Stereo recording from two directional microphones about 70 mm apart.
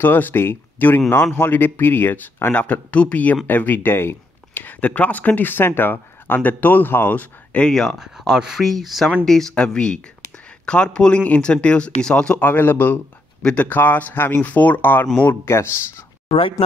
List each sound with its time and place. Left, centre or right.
0.0 s speech: left
2.5 s speech: left
8.0 s speech: centre
12.4 s speech: left
13.4 s speech: centre
13.7 s speech: left
15.4 s speech: left